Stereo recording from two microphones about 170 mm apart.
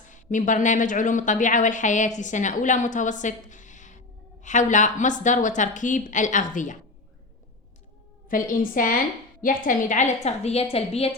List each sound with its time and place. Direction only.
0.1 s a woman's voice: 50° left (ahead or behind)
8.3 s a woman's voice: 55° left (ahead or behind)
10.2 s a woman's voice: 40° left (ahead or behind)